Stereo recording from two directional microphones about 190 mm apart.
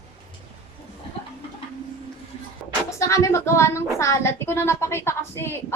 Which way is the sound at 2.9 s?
15° left (ahead or behind).